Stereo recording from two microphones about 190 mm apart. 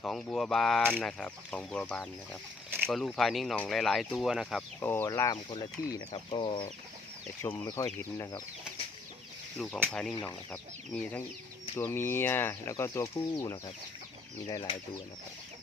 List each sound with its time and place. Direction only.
0.0 s speech: 5° left (ahead or behind)
4.8 s speech: 15° left (ahead or behind)
7.4 s speech: 15° left (ahead or behind)
9.6 s speech: centre (ahead or behind); by 14.8 s 25° left (ahead or behind)